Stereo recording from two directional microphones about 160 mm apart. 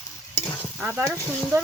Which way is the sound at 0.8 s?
10° right (ahead or behind).